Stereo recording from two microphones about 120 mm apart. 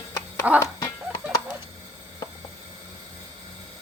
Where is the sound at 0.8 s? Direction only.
35° left (ahead or behind).